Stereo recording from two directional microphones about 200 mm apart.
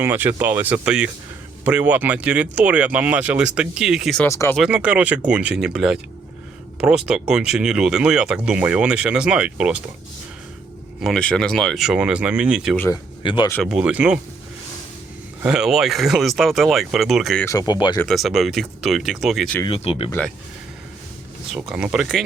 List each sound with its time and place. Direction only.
0.0 s speech: 10° right (ahead or behind)
4.3 s speech: 15° left (ahead or behind)
4.5 s speech: 5° right (ahead or behind)
11.0 s speech: 5° left (ahead or behind)
12.7 s speech: 10° left (ahead or behind)
13.2 s speech: 25° left (ahead or behind)
13.7 s speech: 5° right (ahead or behind)
15.4 s speech: 5° right (ahead or behind)
17.4 s speech: 15° left (ahead or behind)
17.9 s speech: 5° left (ahead or behind)
19.6 s speech: 30° left (ahead or behind)
21.5 s speech: 5° right (ahead or behind)